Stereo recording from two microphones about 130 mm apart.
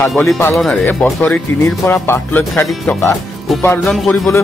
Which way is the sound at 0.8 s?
15° left (ahead or behind).